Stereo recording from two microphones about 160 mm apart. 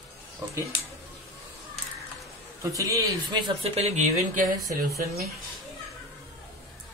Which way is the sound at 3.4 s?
40° right (ahead or behind).